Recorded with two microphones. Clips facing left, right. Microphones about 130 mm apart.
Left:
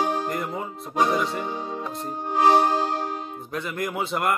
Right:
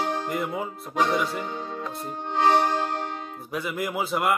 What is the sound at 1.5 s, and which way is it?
Music, 15° left (ahead or behind).